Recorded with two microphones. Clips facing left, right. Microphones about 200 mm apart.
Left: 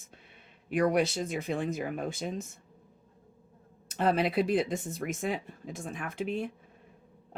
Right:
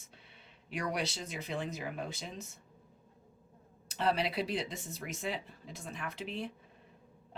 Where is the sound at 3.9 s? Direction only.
50° left (ahead or behind).